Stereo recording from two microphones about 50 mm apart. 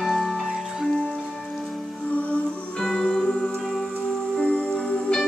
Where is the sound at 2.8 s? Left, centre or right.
Centre.